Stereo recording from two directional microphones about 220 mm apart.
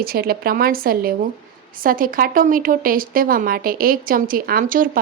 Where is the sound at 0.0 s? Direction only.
40° right (ahead or behind).